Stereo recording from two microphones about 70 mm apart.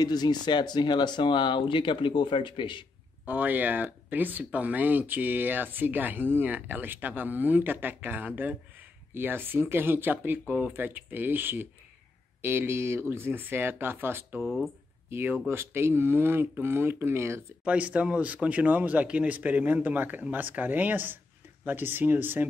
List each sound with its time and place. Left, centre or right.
0.0 s speech: left
3.3 s speech: right
14.4 s speech: centre
15.0 s speech: right
17.6 s speech: centre